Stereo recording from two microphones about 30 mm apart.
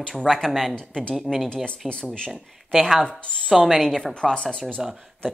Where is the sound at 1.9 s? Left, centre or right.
Left.